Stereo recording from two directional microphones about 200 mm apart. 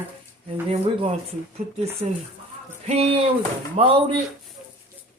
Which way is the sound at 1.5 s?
35° right (ahead or behind).